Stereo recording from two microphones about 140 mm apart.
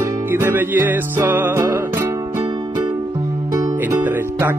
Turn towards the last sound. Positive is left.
turn(degrees=-15)  # may be behind; listen again after turning